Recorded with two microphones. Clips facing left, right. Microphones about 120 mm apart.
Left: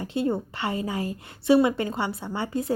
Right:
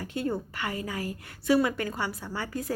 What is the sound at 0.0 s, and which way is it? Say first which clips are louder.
A woman's voice: left 5 dB; 25° left (ahead or behind).